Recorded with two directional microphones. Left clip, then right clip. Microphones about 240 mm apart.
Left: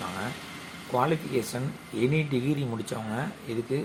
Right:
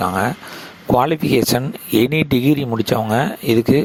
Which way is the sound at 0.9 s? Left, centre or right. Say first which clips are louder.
Right 11 dB; right.